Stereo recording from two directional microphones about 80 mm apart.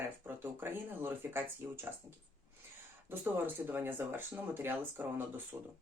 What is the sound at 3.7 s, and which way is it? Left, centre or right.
Speech, right.